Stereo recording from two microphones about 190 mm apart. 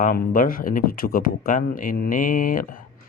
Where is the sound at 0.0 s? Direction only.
45° left (ahead or behind).